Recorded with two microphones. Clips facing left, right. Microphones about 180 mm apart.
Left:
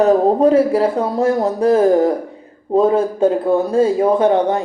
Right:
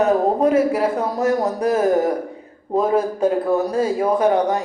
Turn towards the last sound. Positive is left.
turn(degrees=25)  # may be behind; listen again after turning